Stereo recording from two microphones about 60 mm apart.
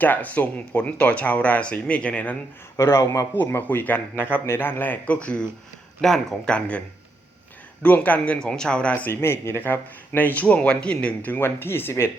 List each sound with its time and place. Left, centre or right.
0.0 s speech: left
2.7 s a man's voice: left
3.3 s a man's voice: left
5.1 s speech: centre
6.0 s speech: centre
6.5 s speech: centre
8.4 s speech: centre
9.2 s a man's voice: left
9.6 s speech: left; by 11.3 s centre
11.3 s a man's voice: left